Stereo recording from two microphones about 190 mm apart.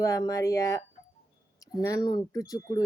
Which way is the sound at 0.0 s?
15° left (ahead or behind).